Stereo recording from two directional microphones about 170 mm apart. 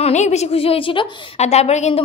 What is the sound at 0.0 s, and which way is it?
A woman's voice, 40° left (ahead or behind).